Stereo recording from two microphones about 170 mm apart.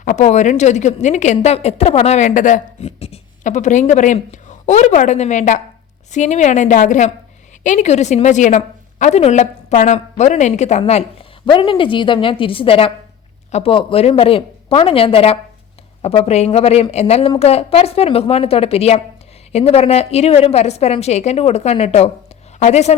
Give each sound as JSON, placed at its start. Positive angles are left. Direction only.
{"t": 0.0, "sound": "a woman's voice", "side_deg": 45}